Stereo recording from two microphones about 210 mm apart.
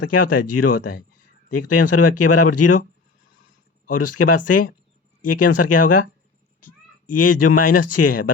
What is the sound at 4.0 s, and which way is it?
Speech, 90° left.